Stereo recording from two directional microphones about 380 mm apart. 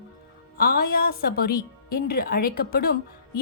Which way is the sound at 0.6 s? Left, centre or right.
Left.